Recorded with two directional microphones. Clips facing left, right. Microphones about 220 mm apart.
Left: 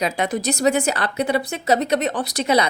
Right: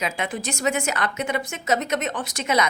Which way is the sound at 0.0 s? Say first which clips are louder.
Left 6 dB; 35° left (ahead or behind).